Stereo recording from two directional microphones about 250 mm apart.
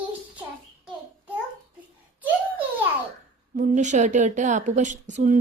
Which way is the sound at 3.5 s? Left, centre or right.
Right.